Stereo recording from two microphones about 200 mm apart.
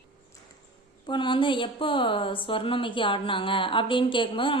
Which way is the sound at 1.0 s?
25° left (ahead or behind).